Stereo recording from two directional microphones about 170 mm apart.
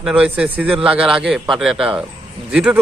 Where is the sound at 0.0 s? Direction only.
5° right (ahead or behind).